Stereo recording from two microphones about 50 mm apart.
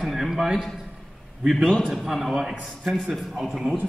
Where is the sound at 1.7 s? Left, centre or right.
Centre.